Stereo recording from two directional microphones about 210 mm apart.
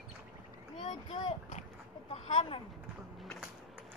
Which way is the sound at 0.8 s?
25° left (ahead or behind).